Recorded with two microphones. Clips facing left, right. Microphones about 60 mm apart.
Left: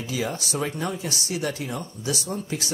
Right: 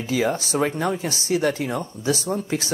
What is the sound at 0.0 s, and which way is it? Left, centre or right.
Speech, right.